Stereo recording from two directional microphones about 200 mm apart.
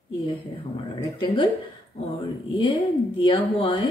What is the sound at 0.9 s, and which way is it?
Speech, 25° left (ahead or behind).